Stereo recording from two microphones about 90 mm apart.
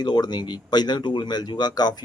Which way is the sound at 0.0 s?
55° left (ahead or behind).